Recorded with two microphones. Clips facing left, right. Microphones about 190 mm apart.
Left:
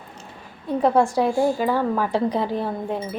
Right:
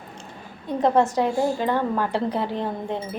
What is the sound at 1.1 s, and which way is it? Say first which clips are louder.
A woman's voice: left 2 dB; 10° left (ahead or behind).